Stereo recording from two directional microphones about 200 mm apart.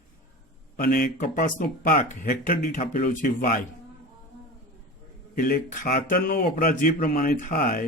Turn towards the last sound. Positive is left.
turn(degrees=45)  # may be behind; listen again after turning